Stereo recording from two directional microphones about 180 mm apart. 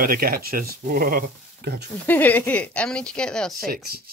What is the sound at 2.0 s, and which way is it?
Speech, 10° left (ahead or behind).